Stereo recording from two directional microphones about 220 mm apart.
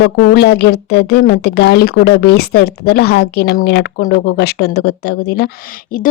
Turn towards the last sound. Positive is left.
turn(degrees=40)  # may be behind; listen again after turning